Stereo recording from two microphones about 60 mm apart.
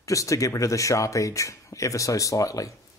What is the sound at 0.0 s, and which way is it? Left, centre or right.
Speech, left.